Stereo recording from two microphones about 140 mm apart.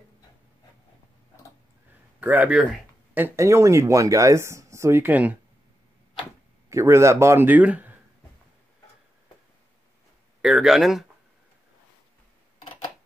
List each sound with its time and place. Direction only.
2.1 s speech: 10° right (ahead or behind)
6.7 s speech: 20° right (ahead or behind)
10.4 s speech: 5° right (ahead or behind)